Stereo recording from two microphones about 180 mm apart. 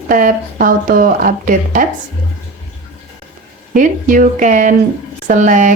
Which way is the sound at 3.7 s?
45° right (ahead or behind).